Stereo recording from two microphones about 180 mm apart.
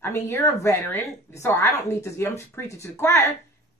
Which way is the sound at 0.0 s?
15° left (ahead or behind).